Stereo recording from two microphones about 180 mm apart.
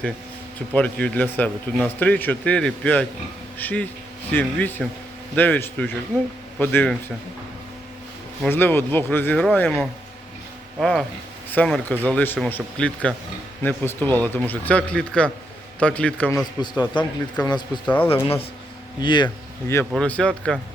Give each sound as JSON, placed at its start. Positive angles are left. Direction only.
{"t": 0.7, "sound": "a man's voice", "side_deg": 5}
{"t": 8.4, "sound": "a man's voice", "side_deg": 10}
{"t": 16.6, "sound": "speech", "side_deg": 25}
{"t": 17.8, "sound": "a man's voice", "side_deg": 10}
{"t": 18.9, "sound": "speech", "side_deg": 25}
{"t": 19.6, "sound": "a man's voice", "side_deg": 15}